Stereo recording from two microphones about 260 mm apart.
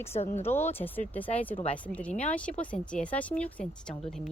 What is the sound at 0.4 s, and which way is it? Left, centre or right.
Speech, centre.